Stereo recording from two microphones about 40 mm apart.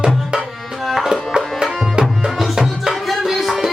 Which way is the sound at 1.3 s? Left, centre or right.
Right.